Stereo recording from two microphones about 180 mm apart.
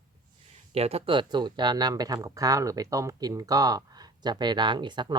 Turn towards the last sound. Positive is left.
turn(degrees=-25)  # may be behind; listen again after turning